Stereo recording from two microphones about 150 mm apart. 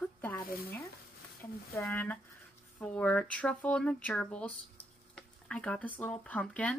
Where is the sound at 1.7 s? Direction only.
20° left (ahead or behind).